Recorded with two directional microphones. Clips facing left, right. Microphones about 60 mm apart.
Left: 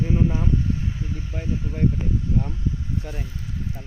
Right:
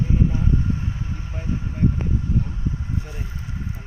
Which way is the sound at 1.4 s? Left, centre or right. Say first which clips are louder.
Right 1 dB; right.